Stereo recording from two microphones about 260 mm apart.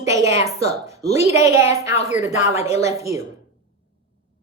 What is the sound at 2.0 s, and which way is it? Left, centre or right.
Speech, left.